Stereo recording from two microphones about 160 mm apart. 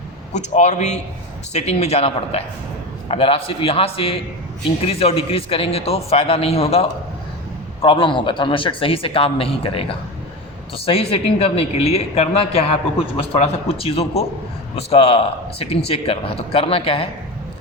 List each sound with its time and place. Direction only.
0.3 s a man's voice: 50° left (ahead or behind)